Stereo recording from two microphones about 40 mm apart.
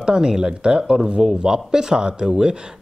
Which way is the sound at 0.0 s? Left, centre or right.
Centre.